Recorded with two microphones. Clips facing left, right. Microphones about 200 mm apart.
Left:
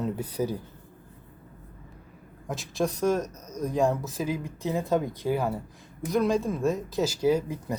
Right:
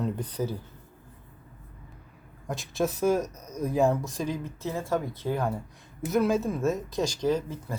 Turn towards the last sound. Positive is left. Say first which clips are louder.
# left 3 dB
turn(degrees=10)  # may be behind; listen again after turning